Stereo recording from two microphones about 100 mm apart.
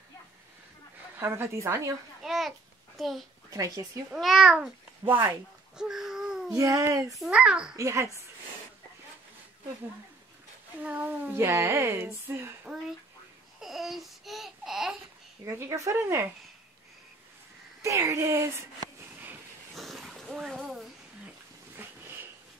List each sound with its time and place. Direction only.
1.1 s speech: 25° right (ahead or behind)
2.2 s a child's voice: centre (ahead or behind)
3.4 s speech: 35° right (ahead or behind)
4.1 s a child's voice: 5° right (ahead or behind)
5.0 s speech: 20° right (ahead or behind)
5.8 s a sound: 5° right (ahead or behind)
6.5 s speech: 30° right (ahead or behind)
7.2 s a child's voice: 10° right (ahead or behind)
7.7 s speech: 30° right (ahead or behind)
10.8 s speech: 15° right (ahead or behind)
13.6 s babbling: centre (ahead or behind)
15.4 s speech: 35° right (ahead or behind)
17.8 s speech: 30° right (ahead or behind)
19.7 s a sound: centre (ahead or behind)